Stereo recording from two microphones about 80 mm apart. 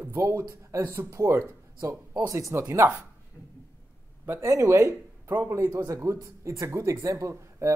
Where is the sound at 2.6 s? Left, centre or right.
Right.